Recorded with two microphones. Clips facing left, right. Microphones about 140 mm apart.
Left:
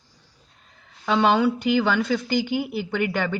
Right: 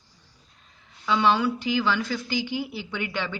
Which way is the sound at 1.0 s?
60° left (ahead or behind).